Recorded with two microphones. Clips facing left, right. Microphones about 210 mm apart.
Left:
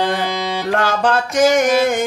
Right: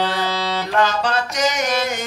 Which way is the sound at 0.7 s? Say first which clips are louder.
Left 3 dB; 50° left (ahead or behind).